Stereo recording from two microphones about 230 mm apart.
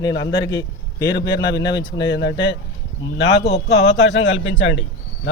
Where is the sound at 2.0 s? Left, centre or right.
Left.